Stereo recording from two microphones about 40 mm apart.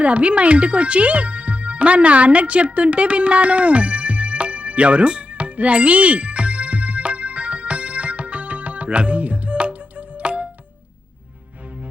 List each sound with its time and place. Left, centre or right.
0.0 s music: right